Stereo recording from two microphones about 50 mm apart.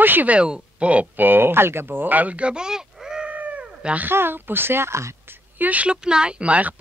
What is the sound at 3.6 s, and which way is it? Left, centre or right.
Cat, right.